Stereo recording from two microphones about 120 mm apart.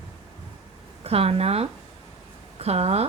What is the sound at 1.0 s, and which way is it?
A woman's voice, 55° right (ahead or behind).